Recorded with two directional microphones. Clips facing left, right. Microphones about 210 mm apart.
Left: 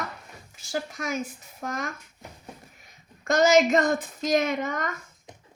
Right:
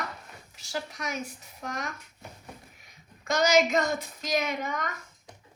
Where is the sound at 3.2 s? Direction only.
50° left (ahead or behind).